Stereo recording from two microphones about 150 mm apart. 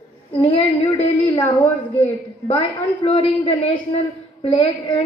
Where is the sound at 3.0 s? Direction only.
40° left (ahead or behind).